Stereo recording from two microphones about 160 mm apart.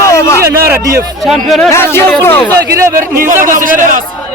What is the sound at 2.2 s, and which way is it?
Speech, 15° left (ahead or behind).